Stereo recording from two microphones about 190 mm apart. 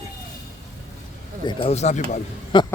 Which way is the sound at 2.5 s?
25° left (ahead or behind).